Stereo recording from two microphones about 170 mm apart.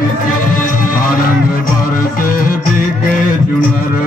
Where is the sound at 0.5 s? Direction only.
55° left (ahead or behind).